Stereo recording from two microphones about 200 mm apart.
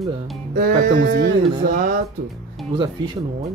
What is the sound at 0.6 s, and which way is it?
Speech, 45° right (ahead or behind).